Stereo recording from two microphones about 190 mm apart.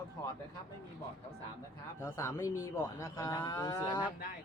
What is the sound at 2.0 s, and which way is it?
Speech, 15° left (ahead or behind).